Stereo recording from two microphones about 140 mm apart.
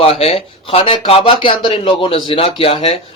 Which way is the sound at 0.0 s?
45° left (ahead or behind).